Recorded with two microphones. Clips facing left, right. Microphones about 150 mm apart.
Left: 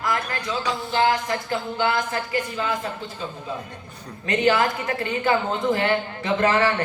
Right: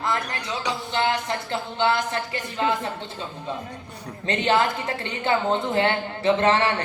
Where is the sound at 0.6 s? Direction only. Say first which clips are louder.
Left 3 dB; 25° right (ahead or behind).